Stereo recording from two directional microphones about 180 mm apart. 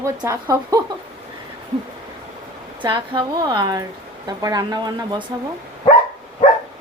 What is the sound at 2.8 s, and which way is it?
Speech, 25° right (ahead or behind).